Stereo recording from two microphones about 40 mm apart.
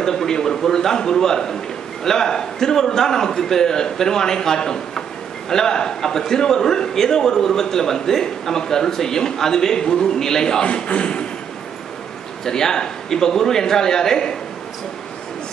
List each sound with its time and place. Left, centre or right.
0.0 s a man's voice: centre
10.6 s a man's voice: left
12.4 s a man's voice: centre